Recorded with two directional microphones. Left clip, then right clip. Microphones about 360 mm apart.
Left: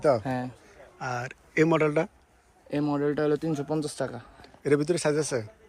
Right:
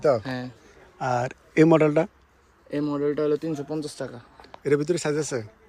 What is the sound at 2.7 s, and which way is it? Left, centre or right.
Speech, centre.